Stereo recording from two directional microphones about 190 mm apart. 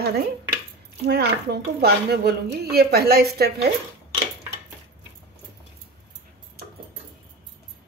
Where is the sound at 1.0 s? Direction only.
60° right (ahead or behind).